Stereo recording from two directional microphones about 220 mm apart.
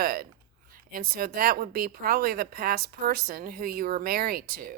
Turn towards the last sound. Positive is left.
turn(degrees=-45)  # may be behind; listen again after turning